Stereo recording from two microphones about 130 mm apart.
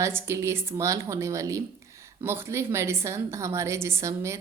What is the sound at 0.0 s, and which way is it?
A woman's voice, 20° right (ahead or behind).